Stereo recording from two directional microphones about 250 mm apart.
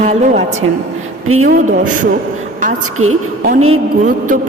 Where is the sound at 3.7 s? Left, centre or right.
Right.